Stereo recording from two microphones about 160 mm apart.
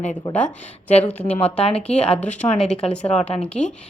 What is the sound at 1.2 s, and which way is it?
Speech, 40° left (ahead or behind).